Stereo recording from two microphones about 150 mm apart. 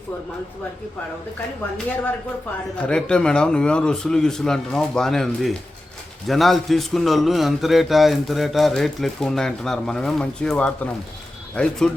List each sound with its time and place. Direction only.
2.7 s a man's voice: 5° left (ahead or behind)